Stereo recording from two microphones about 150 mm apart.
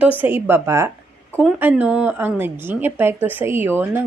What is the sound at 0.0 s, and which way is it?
Speech, 10° right (ahead or behind).